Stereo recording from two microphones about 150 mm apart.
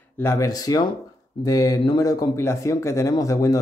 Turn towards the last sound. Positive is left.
turn(degrees=25)  # may be behind; listen again after turning